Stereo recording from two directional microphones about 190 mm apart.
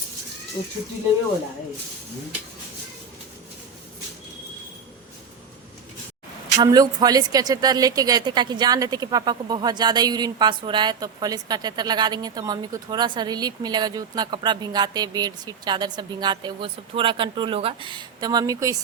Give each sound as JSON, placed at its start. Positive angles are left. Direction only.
{"t": 6.6, "sound": "a woman's voice", "side_deg": -20}